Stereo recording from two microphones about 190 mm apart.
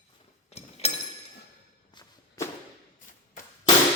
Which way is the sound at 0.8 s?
35° left (ahead or behind).